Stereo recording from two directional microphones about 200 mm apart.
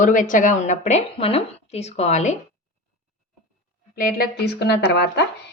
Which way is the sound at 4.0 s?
45° left (ahead or behind).